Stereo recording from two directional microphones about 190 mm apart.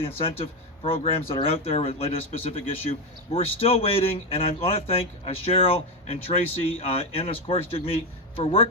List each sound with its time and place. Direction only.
0.2 s speech: 30° left (ahead or behind)